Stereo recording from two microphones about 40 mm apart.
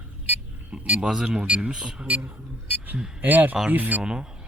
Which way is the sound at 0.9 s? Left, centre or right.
Centre.